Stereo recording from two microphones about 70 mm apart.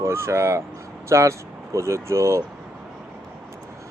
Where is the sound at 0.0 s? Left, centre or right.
Right.